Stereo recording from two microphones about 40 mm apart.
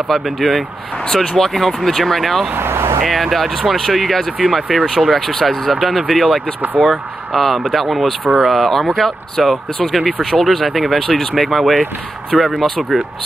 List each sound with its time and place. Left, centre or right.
0.1 s speech: centre
2.5 s speech: right
3.0 s speech: centre
5.1 s speech: centre